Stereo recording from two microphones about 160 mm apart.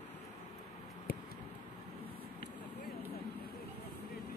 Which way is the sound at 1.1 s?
70° left (ahead or behind).